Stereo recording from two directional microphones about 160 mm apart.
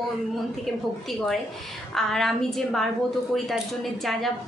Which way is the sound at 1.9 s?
Centre (ahead or behind).